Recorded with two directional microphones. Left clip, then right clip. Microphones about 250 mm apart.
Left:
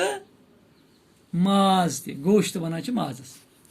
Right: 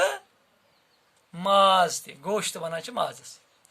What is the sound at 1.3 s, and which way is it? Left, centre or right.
Speech, right.